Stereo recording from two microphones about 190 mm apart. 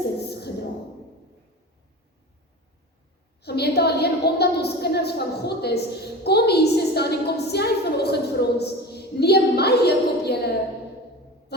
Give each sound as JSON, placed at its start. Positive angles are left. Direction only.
{"t": 3.4, "sound": "a woman's voice", "side_deg": 60}